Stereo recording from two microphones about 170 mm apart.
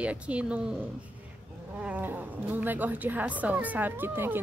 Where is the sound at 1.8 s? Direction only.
10° right (ahead or behind).